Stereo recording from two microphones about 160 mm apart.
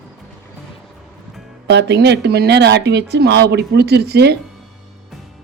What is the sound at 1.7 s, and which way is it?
Speech, 90° right.